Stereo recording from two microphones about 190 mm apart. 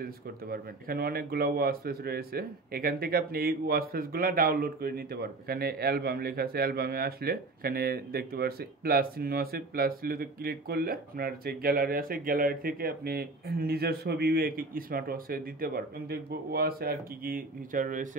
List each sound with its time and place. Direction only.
0.0 s speech: 50° right (ahead or behind)